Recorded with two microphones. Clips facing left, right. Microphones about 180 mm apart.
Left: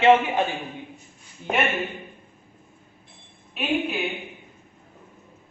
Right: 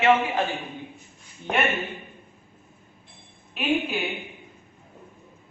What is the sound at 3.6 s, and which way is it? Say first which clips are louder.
Speech: right 2 dB; centre (ahead or behind).